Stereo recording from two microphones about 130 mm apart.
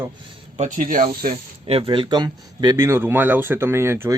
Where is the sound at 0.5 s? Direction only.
80° right.